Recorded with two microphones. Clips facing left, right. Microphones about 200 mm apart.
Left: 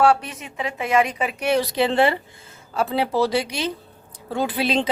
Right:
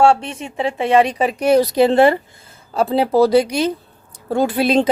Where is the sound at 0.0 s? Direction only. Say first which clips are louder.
Right 4 dB; 25° right (ahead or behind).